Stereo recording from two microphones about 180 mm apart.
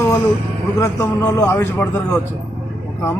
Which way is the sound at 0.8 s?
15° left (ahead or behind).